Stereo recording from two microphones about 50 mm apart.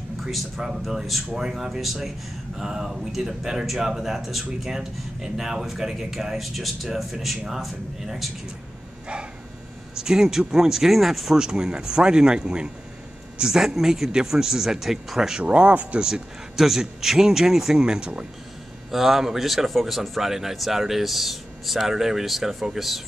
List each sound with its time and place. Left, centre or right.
0.2 s a man's voice: centre
1.3 s a man's voice: centre
9.9 s speech: centre
15.4 s speech: right
16.0 s speech: centre
18.9 s a man's voice: centre